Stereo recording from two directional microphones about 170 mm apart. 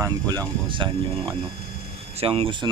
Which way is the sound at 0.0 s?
20° right (ahead or behind).